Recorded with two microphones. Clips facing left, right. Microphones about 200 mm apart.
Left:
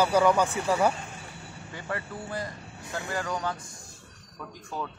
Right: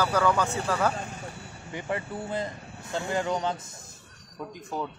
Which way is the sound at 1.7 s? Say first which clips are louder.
Right 4 dB; 20° right (ahead or behind).